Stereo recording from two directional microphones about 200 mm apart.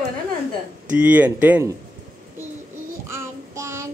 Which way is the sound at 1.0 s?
10° right (ahead or behind).